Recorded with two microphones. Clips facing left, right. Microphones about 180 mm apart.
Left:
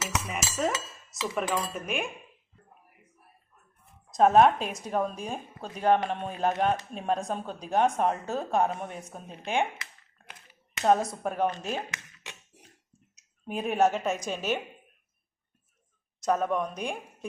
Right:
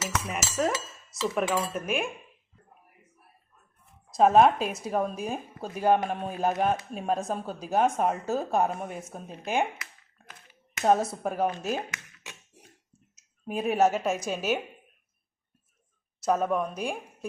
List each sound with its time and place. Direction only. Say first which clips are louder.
0.0 s cutlery: right 1 dB; centre (ahead or behind)
1.1 s speech: right 3 dB; centre (ahead or behind)
4.1 s speech: even; centre (ahead or behind)
10.8 s speech: even; 5° right (ahead or behind)
13.1 s speech: right 2 dB; centre (ahead or behind)
16.2 s speech: right 1 dB; 5° right (ahead or behind)